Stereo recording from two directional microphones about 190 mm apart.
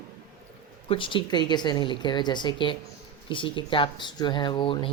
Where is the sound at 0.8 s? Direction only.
30° left (ahead or behind).